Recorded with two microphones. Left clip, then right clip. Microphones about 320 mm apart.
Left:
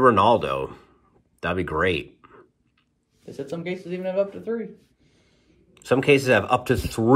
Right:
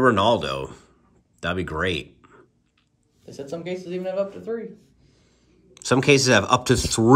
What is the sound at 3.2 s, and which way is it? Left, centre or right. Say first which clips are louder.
Speech: even; left.